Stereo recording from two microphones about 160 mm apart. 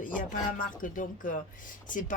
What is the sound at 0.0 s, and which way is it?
A woman's voice, 55° left (ahead or behind).